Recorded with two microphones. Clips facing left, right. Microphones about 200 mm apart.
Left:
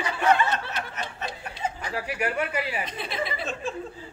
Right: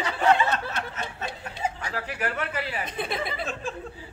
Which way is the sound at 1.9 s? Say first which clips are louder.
Left 2 dB; 10° left (ahead or behind).